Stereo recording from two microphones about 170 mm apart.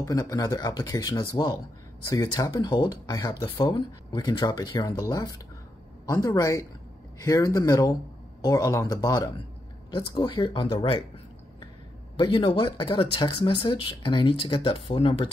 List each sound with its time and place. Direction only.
0.0 s speech: 20° left (ahead or behind)
12.2 s speech: 30° left (ahead or behind)